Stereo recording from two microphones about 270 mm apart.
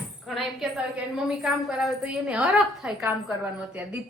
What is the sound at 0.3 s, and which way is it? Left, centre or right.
A woman's voice, centre.